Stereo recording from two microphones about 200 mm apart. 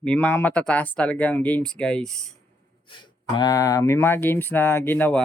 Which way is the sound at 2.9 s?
25° left (ahead or behind).